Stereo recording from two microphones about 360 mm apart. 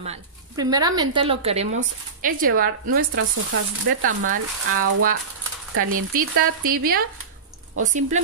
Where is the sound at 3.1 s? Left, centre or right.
Right.